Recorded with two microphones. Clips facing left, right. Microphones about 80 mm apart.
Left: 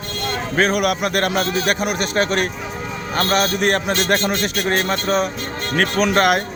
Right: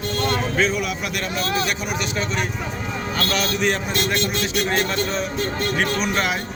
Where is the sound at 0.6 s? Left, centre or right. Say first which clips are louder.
Left 5 dB; left.